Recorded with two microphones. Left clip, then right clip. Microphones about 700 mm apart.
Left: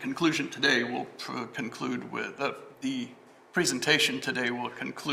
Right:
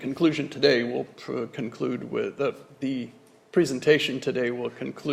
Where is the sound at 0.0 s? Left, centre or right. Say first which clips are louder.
Right 3 dB; right.